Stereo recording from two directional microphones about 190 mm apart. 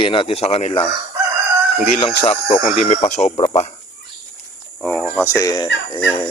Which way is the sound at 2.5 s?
35° left (ahead or behind).